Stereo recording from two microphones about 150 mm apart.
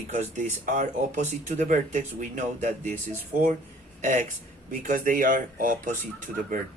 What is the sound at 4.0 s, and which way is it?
Speech, 55° right (ahead or behind).